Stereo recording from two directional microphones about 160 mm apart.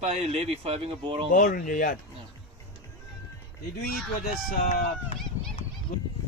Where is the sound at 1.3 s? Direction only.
60° left (ahead or behind).